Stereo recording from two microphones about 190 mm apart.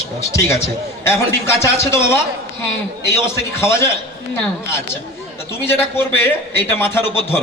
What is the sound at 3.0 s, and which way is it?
Speech, 15° left (ahead or behind).